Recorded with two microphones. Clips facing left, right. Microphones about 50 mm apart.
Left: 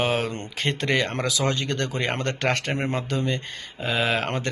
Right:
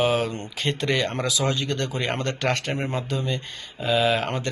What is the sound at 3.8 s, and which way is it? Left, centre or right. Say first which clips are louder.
Speech: right 3 dB; left.